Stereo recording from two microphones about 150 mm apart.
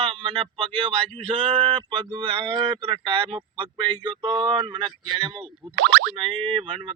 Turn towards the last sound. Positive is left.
turn(degrees=-35)  # may be behind; listen again after turning